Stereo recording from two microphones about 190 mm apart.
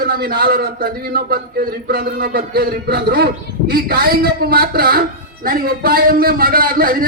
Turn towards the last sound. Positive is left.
turn(degrees=-50)  # may be behind; listen again after turning